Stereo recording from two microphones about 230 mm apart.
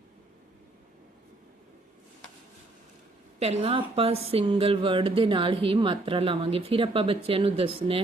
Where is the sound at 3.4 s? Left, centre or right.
Right.